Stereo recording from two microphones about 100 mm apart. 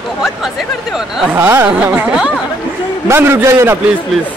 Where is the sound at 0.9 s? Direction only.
5° right (ahead or behind).